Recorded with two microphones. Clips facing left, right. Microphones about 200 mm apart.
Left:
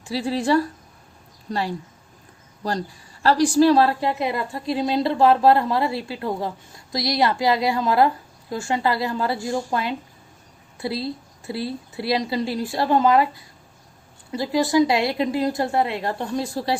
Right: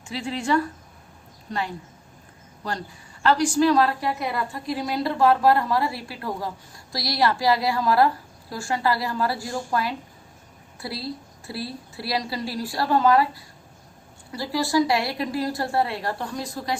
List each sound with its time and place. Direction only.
0.0 s a woman's voice: 35° left (ahead or behind)
3.2 s a woman's voice: 35° left (ahead or behind)